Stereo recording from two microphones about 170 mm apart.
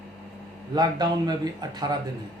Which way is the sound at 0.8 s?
25° right (ahead or behind).